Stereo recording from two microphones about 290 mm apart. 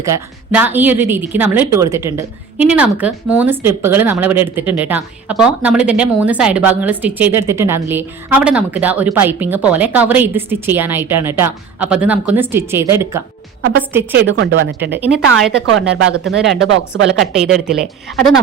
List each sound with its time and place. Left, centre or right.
0.0 s speech: centre
14.1 s speech: right
14.9 s speech: centre